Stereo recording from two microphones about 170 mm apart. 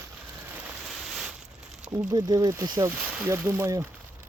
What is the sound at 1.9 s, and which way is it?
Speech, 20° right (ahead or behind).